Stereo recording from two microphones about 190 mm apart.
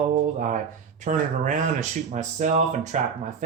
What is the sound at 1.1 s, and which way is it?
Speech, 40° right (ahead or behind).